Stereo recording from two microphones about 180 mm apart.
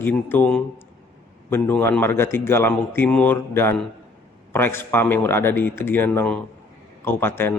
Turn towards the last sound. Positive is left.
turn(degrees=15)  # may be behind; listen again after turning